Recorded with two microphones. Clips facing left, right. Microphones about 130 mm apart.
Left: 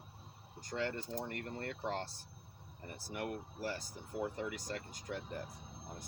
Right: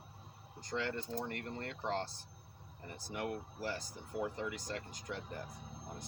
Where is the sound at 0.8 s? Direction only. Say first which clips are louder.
Even; 40° left (ahead or behind).